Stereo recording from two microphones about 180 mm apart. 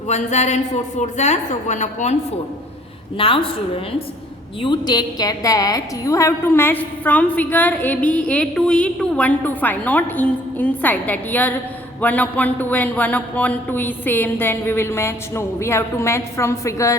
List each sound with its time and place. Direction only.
0.1 s a woman's voice: 40° left (ahead or behind)
3.2 s a woman's voice: 30° left (ahead or behind)
4.6 s a woman's voice: 25° left (ahead or behind)